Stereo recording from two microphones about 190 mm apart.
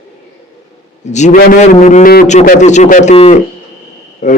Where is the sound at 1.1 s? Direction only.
40° left (ahead or behind).